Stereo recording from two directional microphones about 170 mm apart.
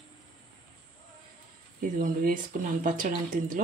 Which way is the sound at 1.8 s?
55° right (ahead or behind).